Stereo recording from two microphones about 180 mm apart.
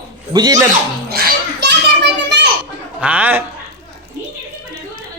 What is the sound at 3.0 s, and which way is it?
Speech, 10° right (ahead or behind).